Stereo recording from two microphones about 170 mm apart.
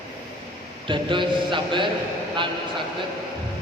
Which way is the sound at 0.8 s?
30° right (ahead or behind).